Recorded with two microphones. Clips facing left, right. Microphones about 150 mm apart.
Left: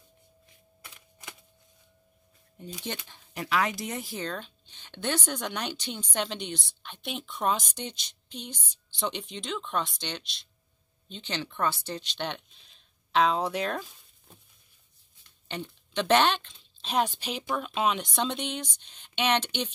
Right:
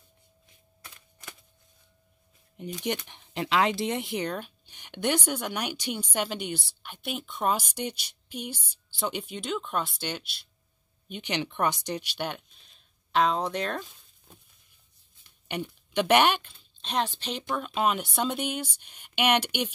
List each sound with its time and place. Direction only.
2.5 s speech: 15° right (ahead or behind); by 14.3 s centre (ahead or behind)
15.4 s speech: 10° right (ahead or behind)
16.8 s speech: 10° left (ahead or behind); by 19.7 s 10° right (ahead or behind)